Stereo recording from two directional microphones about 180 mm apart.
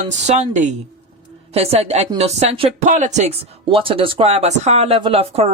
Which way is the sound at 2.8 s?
45° right (ahead or behind).